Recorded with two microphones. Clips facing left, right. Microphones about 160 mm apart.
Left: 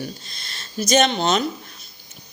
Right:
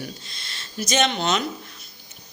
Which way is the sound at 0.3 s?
40° left (ahead or behind).